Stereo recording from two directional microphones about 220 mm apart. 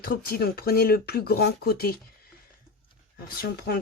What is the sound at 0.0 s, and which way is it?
Speech, 45° left (ahead or behind).